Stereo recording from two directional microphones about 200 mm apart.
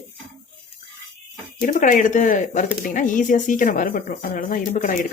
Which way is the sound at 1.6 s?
40° left (ahead or behind).